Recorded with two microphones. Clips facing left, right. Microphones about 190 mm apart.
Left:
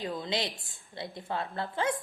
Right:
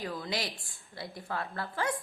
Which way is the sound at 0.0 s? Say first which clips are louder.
Left 2 dB; 25° left (ahead or behind).